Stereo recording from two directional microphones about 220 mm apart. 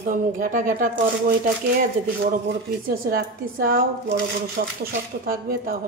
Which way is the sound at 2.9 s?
40° right (ahead or behind).